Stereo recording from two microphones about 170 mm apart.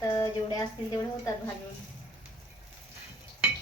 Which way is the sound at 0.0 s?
20° left (ahead or behind).